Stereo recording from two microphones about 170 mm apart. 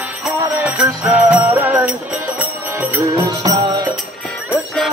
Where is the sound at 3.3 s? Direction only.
25° right (ahead or behind).